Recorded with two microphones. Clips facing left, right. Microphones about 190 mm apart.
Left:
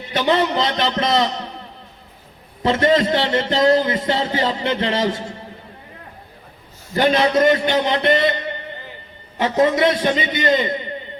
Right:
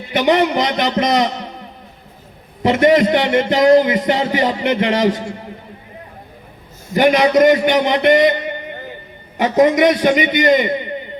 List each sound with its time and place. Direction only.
0.1 s a man's voice: 15° right (ahead or behind)
2.6 s a man's voice: 20° right (ahead or behind)
6.9 s a man's voice: 15° right (ahead or behind)